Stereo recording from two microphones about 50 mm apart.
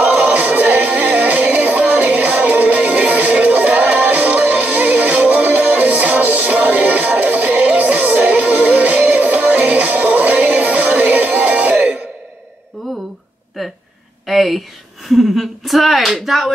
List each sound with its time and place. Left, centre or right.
0.0 s music: right
13.6 s a sound: centre
15.0 s slap: centre